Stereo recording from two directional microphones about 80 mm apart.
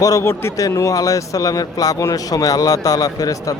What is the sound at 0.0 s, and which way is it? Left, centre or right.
A man's voice, left.